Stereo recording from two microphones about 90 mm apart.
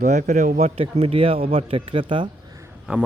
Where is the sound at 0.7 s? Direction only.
90° right.